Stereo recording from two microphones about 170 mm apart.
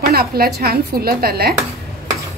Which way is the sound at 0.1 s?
65° right (ahead or behind).